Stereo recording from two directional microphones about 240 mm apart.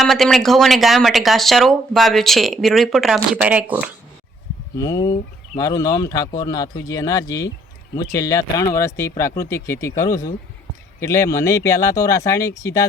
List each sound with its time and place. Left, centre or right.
0.0 s speech: centre
4.8 s speech: centre